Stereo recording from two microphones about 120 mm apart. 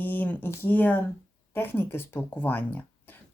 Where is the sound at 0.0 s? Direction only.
15° left (ahead or behind).